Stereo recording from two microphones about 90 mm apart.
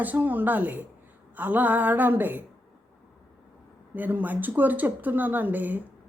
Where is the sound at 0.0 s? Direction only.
20° right (ahead or behind).